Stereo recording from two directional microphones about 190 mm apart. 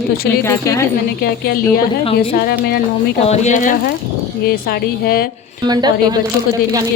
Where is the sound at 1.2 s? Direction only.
55° left (ahead or behind).